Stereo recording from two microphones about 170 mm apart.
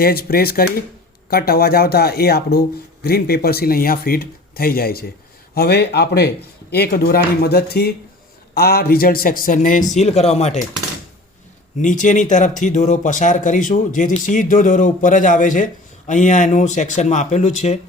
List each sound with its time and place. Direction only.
0.0 s speech: 65° left (ahead or behind); by 10.6 s 40° left (ahead or behind)
11.8 s speech: 45° left (ahead or behind)